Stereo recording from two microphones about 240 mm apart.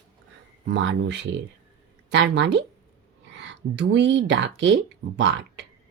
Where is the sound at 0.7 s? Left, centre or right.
Right.